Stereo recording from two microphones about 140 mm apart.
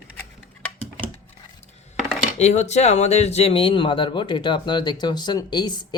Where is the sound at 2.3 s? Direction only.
55° left (ahead or behind); by 5.7 s 30° left (ahead or behind).